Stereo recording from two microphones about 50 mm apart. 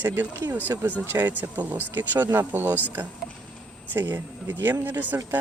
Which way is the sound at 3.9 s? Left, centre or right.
Right.